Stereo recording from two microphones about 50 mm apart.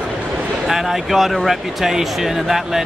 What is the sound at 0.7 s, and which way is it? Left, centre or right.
Speech, centre.